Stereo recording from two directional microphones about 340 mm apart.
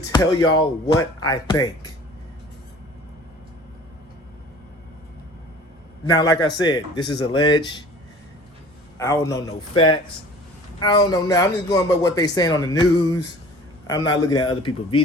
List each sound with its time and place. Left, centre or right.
0.0 s speech: centre
6.1 s speech: centre
9.0 s speech: centre